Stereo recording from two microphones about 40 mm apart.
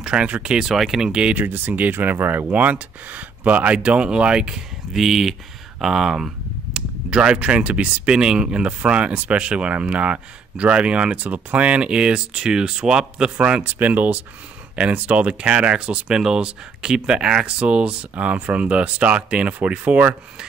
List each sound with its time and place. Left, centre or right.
0.0 s speech: right
0.7 s speech: centre
1.3 s speech: right
3.7 s speech: right
4.9 s speech: centre
5.8 s a sound: centre
7.1 s speech: right
13.7 s speech: right
16.1 s speech: centre
17.5 s speech: right